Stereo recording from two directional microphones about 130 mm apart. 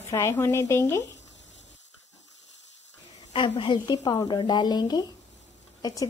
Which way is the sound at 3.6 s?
40° left (ahead or behind).